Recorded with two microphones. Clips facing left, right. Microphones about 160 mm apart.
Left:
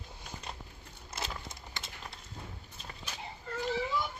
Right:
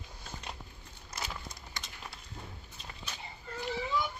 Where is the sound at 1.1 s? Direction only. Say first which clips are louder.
Left 1 dB; 25° left (ahead or behind).